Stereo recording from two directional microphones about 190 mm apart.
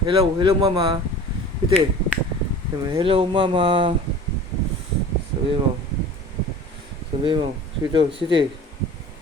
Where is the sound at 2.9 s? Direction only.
25° right (ahead or behind).